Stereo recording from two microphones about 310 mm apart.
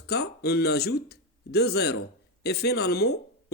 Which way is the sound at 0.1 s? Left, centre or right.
Left.